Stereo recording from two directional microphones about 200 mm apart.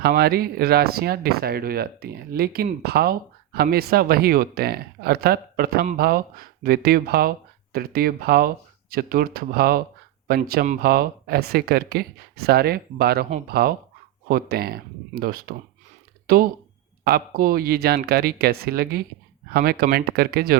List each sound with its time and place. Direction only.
0.0 s speech: 50° right (ahead or behind)